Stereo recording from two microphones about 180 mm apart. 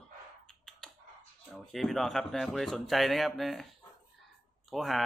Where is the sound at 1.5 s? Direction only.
Centre (ahead or behind).